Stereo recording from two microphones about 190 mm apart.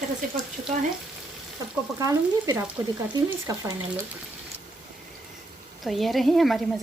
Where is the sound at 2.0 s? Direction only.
15° right (ahead or behind).